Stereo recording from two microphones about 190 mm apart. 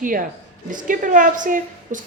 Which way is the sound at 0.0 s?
45° right (ahead or behind).